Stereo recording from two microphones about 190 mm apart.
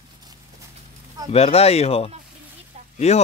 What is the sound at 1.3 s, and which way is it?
Speech, 30° left (ahead or behind).